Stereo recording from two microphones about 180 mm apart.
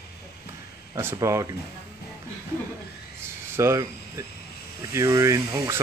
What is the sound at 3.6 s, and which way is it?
Speech, 15° right (ahead or behind).